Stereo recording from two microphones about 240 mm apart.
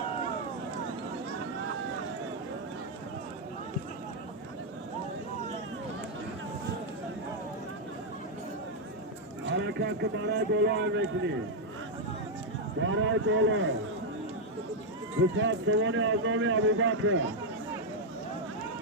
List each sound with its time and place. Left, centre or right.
9.5 s a man's voice: right
12.8 s speech: right
15.4 s a man's voice: right